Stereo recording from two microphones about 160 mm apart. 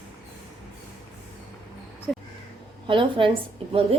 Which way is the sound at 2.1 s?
5° left (ahead or behind).